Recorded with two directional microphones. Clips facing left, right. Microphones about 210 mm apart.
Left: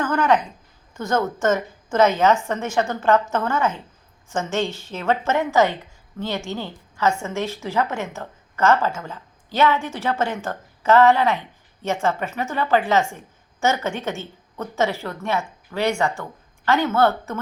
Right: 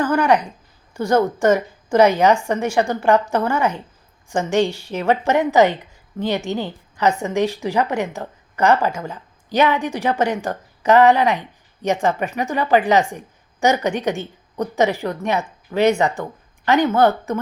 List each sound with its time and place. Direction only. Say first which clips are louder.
0.0 s a woman's voice: right 3 dB; 10° right (ahead or behind)